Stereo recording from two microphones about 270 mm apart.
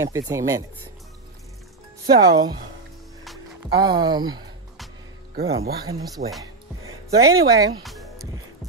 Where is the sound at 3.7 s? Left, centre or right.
Centre.